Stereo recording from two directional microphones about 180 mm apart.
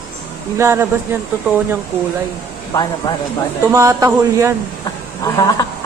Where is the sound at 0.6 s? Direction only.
15° right (ahead or behind).